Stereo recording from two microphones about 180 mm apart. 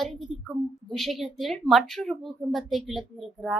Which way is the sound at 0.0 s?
Centre (ahead or behind).